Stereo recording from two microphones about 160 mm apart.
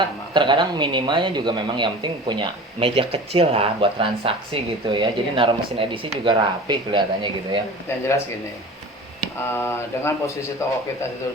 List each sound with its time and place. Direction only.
0.3 s a man's voice: 30° right (ahead or behind)
9.6 s speech: 15° left (ahead or behind)